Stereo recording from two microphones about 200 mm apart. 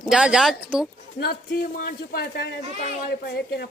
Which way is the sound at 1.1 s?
50° left (ahead or behind).